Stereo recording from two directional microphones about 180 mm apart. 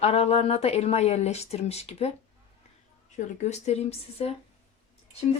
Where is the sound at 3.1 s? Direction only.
40° left (ahead or behind).